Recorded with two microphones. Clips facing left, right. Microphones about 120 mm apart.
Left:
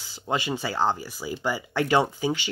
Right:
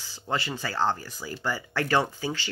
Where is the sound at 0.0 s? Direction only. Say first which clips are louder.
Left 2 dB; 15° left (ahead or behind).